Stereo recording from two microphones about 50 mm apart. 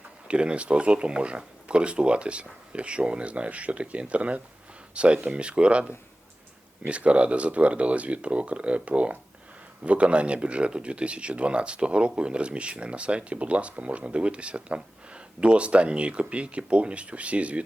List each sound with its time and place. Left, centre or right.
0.3 s speech: right